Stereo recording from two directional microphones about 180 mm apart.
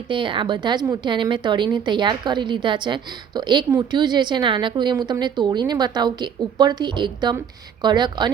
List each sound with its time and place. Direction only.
0.1 s a woman's voice: 25° right (ahead or behind)